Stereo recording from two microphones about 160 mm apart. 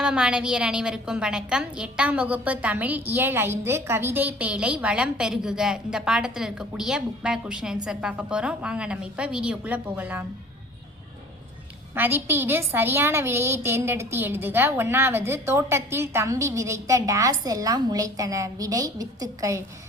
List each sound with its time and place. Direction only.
0.0 s a woman's voice: 5° right (ahead or behind)
11.9 s a woman's voice: 10° right (ahead or behind)